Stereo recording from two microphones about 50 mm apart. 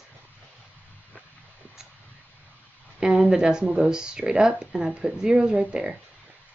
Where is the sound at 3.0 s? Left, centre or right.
Centre.